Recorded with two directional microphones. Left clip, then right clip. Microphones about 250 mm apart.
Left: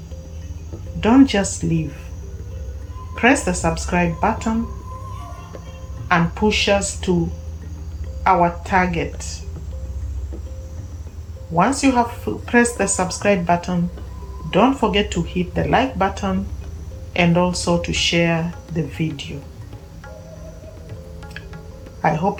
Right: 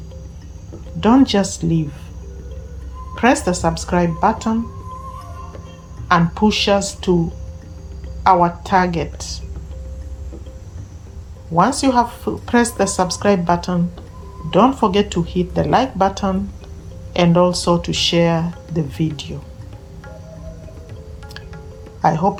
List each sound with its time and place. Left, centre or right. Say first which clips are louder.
1.0 s speech: right 1 dB; centre
3.2 s speech: right 1 dB; centre
6.1 s speech: right 2 dB; centre
8.2 s speech: right 3 dB; right
11.5 s speech: right 2 dB; centre
22.0 s speech: right 3 dB; centre